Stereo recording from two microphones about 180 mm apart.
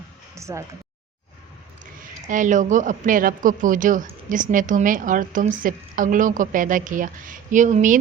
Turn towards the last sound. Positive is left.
turn(degrees=-45)  # may be behind; listen again after turning